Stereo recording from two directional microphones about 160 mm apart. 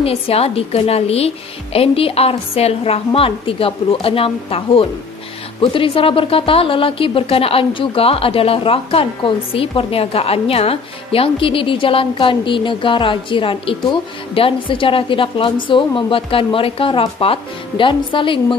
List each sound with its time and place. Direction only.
0.0 s a woman's voice: 40° left (ahead or behind)